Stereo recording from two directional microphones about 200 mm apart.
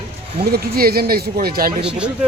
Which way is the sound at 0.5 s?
50° right (ahead or behind).